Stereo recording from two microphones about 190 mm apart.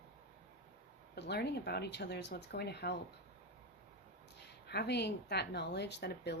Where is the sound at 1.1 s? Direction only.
60° left (ahead or behind).